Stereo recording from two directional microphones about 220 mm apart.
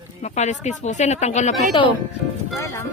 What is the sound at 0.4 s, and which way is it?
Speech, 30° left (ahead or behind).